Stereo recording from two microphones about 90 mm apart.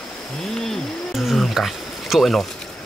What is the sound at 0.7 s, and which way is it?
Wild animals, centre (ahead or behind).